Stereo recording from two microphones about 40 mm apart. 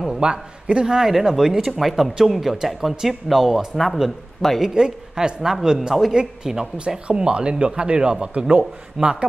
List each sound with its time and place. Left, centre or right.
0.2 s a man's voice: right
0.9 s speech: centre
1.8 s speech: centre
4.7 s speech: centre
9.0 s speech: centre